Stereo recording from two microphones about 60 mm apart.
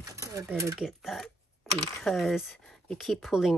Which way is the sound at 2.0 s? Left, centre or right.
Centre.